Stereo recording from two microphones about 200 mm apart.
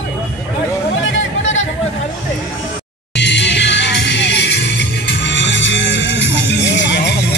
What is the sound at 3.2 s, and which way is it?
Music, 60° left (ahead or behind).